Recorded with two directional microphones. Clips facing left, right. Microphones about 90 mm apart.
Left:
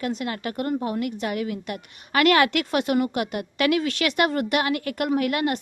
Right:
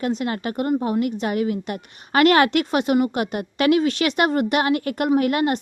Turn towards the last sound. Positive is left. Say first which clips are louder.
# right 4 dB
turn(degrees=-30)  # may be behind; listen again after turning